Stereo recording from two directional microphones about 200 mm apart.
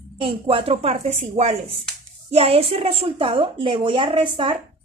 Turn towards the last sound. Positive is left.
turn(degrees=-25)  # may be behind; listen again after turning